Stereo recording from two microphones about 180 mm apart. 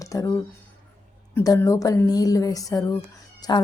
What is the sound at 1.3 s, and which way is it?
A woman's voice, 15° left (ahead or behind).